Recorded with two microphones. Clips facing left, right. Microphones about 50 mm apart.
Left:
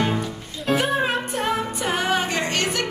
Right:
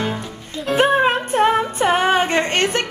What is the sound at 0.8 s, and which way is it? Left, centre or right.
Music, right.